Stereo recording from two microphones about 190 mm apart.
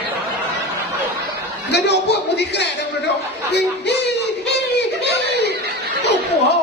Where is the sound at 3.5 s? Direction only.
60° left (ahead or behind).